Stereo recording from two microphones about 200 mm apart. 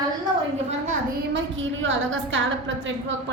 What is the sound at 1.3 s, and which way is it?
A woman's voice, 70° right (ahead or behind).